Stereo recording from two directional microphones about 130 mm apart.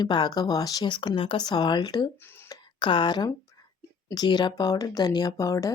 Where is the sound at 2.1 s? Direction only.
15° left (ahead or behind).